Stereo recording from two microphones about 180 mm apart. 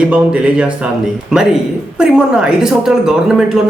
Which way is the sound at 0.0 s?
10° right (ahead or behind).